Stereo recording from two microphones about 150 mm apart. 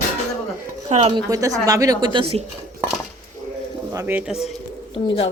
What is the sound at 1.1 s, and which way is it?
Speech, 25° right (ahead or behind).